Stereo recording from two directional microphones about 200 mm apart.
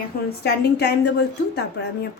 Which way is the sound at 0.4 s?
55° left (ahead or behind).